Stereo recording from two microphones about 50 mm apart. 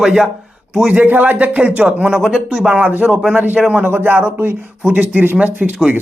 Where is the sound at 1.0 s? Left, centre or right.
Right; by 2.7 s centre.